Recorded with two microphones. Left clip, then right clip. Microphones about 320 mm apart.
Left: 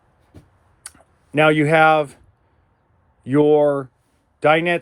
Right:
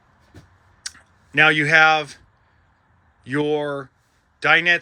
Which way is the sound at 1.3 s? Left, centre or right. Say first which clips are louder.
Even; centre.